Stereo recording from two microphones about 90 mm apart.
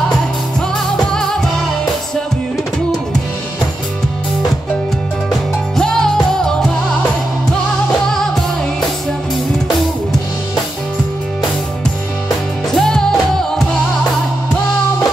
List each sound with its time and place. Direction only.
0.6 s music: 5° left (ahead or behind)
5.8 s music: 5° left (ahead or behind)
8.1 s music: 5° left (ahead or behind)
12.7 s music: 5° left (ahead or behind)